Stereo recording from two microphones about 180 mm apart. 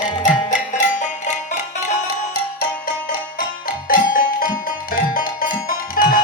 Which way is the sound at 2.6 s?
50° left (ahead or behind).